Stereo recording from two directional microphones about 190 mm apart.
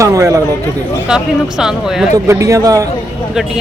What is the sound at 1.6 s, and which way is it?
Speech, centre (ahead or behind).